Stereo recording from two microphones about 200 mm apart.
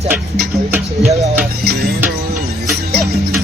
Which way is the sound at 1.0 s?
30° right (ahead or behind).